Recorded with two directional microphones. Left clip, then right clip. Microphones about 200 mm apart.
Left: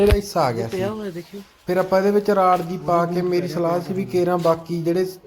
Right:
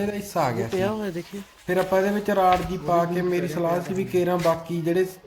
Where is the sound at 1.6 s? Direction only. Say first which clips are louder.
Left 3 dB; 10° left (ahead or behind).